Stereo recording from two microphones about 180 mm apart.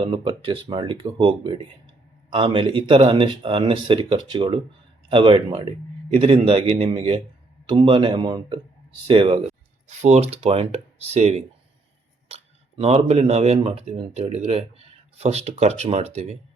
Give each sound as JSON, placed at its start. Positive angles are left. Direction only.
{"t": 0.0, "sound": "speech", "side_deg": -30}
{"t": 9.8, "sound": "speech", "side_deg": -40}